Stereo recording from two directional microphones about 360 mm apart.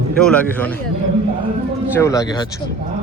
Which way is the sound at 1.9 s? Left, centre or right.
Centre.